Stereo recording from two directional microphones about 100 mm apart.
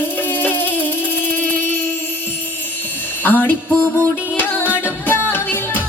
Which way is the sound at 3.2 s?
20° left (ahead or behind).